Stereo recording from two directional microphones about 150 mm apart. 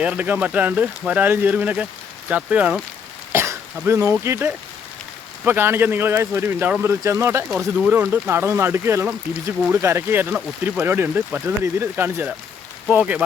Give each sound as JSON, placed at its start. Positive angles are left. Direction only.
{"t": 0.0, "sound": "speech", "side_deg": -10}